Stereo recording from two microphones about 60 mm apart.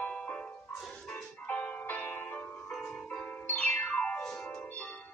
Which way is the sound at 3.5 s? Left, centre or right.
Left.